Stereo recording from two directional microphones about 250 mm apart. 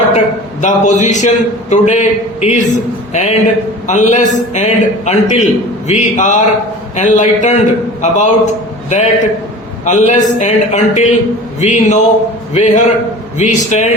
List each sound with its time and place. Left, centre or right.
0.6 s a man's voice: left